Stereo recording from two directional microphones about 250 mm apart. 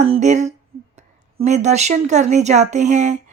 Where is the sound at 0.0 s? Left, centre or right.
Right.